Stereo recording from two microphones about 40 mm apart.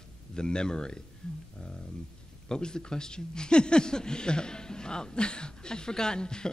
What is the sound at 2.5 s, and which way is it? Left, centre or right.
A man's voice, centre.